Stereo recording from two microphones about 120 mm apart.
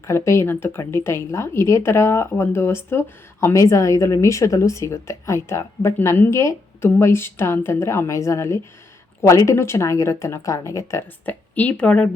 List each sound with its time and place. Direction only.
0.1 s a woman's voice: 20° left (ahead or behind)
11.3 s speech: 15° left (ahead or behind)